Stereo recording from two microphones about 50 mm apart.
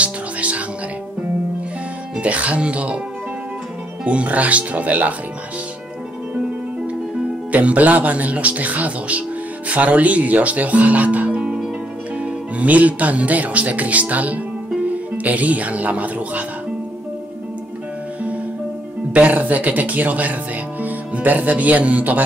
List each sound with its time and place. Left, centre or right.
0.0 s music: right
2.1 s speech: right
4.0 s speech: right
7.5 s speech: right
11.4 s music: centre
12.2 s speech: right
19.1 s speech: right